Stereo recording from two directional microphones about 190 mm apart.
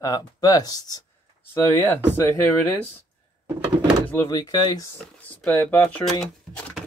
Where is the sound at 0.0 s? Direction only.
20° left (ahead or behind).